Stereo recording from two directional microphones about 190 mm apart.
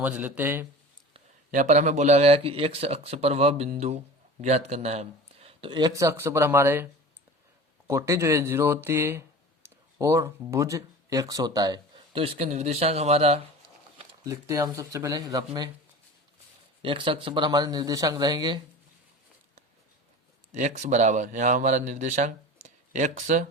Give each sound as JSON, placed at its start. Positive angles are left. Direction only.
{"t": 0.0, "sound": "speech", "side_deg": -10}
{"t": 1.1, "sound": "speech", "side_deg": -40}
{"t": 7.9, "sound": "speech", "side_deg": -15}
{"t": 14.3, "sound": "speech", "side_deg": -15}
{"t": 16.8, "sound": "speech", "side_deg": -25}
{"t": 20.5, "sound": "speech", "side_deg": -40}